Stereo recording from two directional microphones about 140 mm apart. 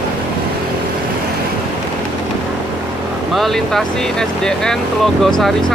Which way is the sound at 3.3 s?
Centre (ahead or behind).